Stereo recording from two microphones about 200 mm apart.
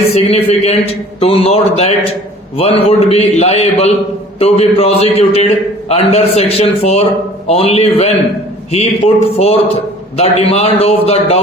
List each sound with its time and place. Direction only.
0.1 s a man's voice: 30° left (ahead or behind)